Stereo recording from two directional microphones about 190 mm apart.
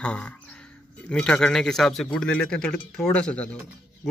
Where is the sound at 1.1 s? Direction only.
5° left (ahead or behind).